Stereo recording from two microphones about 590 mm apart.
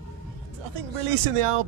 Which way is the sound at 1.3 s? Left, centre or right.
Right.